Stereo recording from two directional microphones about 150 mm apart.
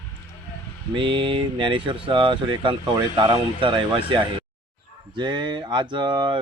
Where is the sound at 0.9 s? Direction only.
30° right (ahead or behind).